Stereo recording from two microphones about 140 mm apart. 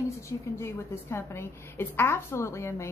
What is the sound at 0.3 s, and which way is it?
A woman's voice, 20° left (ahead or behind).